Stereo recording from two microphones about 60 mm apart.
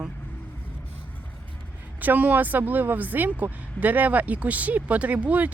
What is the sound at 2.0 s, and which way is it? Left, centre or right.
Speech, right.